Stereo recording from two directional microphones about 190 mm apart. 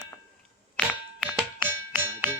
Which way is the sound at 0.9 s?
Centre (ahead or behind).